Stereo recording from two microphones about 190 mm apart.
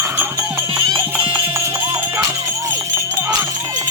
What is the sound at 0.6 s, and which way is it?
Music, 25° right (ahead or behind).